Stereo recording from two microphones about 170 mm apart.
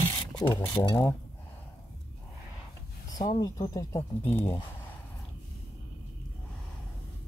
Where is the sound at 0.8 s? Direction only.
15° left (ahead or behind).